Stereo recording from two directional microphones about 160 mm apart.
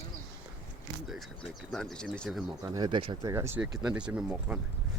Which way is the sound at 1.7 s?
5° left (ahead or behind).